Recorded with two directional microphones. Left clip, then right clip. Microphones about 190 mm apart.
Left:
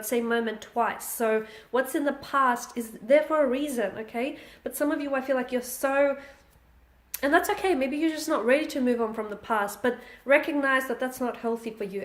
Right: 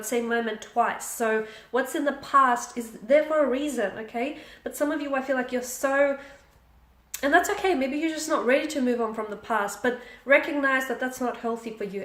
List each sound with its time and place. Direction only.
0.0 s speech: 40° left (ahead or behind)
7.1 s speech: 35° left (ahead or behind)